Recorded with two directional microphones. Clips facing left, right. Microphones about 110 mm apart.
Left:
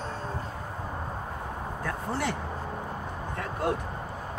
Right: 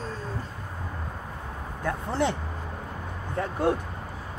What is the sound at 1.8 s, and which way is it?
Speech, 25° right (ahead or behind).